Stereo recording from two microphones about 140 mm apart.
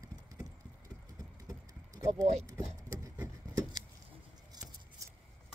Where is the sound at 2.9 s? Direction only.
20° right (ahead or behind).